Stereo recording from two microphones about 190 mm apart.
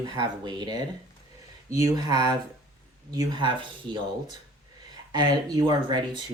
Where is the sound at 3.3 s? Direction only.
25° right (ahead or behind).